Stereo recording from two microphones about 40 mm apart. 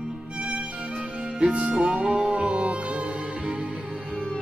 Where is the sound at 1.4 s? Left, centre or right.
Right.